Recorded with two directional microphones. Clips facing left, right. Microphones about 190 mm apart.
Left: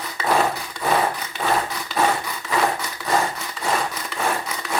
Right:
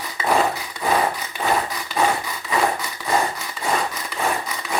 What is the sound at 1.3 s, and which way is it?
Wood, 5° right (ahead or behind).